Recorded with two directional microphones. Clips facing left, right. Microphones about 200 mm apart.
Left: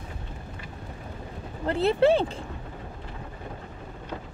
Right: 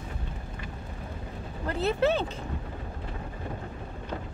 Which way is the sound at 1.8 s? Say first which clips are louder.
Left 5 dB; 30° left (ahead or behind).